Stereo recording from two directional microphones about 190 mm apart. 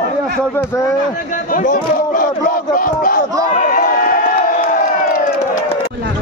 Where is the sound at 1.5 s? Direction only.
45° left (ahead or behind).